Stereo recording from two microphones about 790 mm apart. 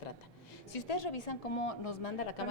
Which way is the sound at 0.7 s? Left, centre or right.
Left.